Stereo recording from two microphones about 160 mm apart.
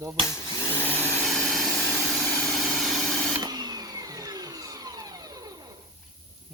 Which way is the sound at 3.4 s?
25° right (ahead or behind).